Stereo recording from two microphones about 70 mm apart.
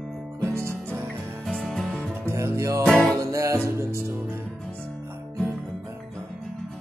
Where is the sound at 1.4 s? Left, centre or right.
Centre.